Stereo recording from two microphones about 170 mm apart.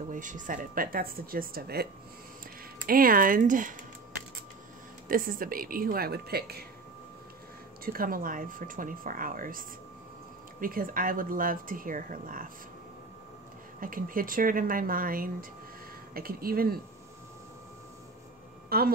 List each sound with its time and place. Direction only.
0.1 s speech: 50° right (ahead or behind); by 1.9 s 65° right (ahead or behind)
2.9 s speech: 55° right (ahead or behind)
5.0 s speech: 55° right (ahead or behind)
7.8 s speech: 60° right (ahead or behind)
13.7 s speech: 55° right (ahead or behind)
18.7 s speech: 60° right (ahead or behind)